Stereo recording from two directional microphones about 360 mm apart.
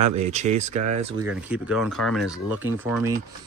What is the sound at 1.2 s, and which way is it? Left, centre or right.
Speech, centre.